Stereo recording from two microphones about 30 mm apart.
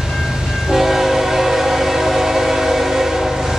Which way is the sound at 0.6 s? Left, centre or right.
Centre.